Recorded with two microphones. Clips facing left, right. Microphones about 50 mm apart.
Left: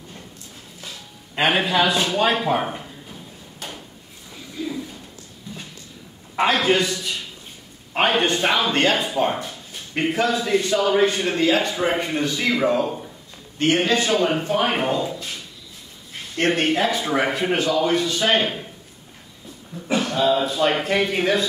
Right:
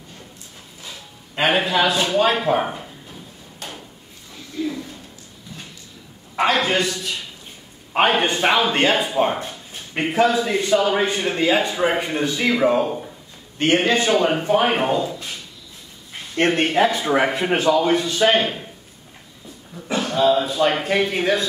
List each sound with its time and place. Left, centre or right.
1.3 s a man's voice: centre
3.5 s drawer open or close: centre
6.6 s a man's voice: centre
9.4 s a sound: right
10.0 s a man's voice: centre
13.7 s a man's voice: centre
16.4 s a man's voice: centre
18.3 s speech: centre
20.0 s a man's voice: centre